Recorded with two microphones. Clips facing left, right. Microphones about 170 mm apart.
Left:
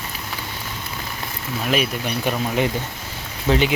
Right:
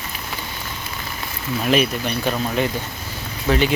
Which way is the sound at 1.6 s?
5° left (ahead or behind).